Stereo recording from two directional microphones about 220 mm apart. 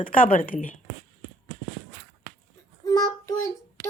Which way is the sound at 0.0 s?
40° left (ahead or behind).